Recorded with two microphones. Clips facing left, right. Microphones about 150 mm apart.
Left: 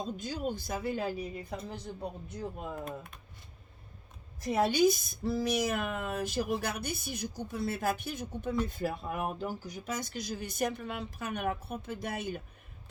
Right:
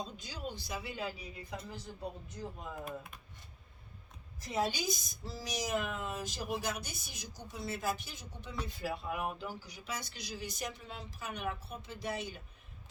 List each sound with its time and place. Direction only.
0.0 s speech: 50° left (ahead or behind)
2.3 s speech: 60° left (ahead or behind)
2.8 s speech: 5° right (ahead or behind)
4.4 s speech: 60° left (ahead or behind)